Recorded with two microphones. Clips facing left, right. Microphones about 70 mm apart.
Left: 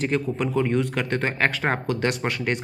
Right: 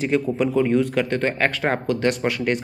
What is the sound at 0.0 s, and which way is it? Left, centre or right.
Speech, centre.